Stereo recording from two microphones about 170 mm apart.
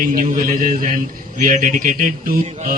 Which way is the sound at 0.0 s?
55° right (ahead or behind).